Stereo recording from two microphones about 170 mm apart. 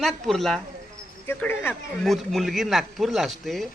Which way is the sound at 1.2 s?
10° left (ahead or behind).